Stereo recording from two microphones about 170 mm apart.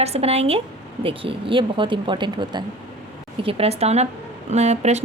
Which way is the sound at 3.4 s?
35° right (ahead or behind).